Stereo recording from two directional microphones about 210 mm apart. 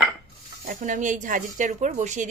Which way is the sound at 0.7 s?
35° right (ahead or behind).